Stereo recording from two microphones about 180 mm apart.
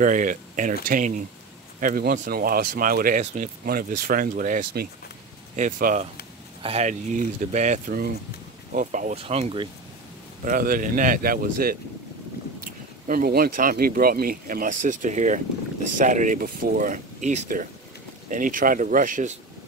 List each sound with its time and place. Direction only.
0.0 s speech: 45° right (ahead or behind)
6.6 s speech: 35° right (ahead or behind)
10.4 s speech: 50° right (ahead or behind)